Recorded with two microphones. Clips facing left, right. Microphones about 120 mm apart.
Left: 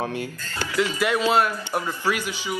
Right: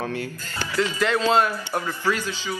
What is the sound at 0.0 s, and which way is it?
Speech, 20° left (ahead or behind).